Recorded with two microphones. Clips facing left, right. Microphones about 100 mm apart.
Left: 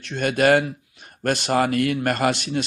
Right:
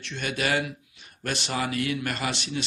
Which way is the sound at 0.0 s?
45° left (ahead or behind).